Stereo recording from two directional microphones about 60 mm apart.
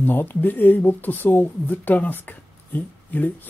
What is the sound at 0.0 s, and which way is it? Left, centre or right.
Speech, left.